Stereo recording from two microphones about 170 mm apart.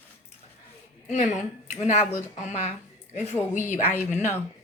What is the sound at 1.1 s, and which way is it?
A woman's voice, 45° left (ahead or behind).